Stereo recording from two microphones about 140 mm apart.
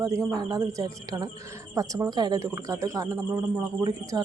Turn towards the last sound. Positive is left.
turn(degrees=-30)  # may be behind; listen again after turning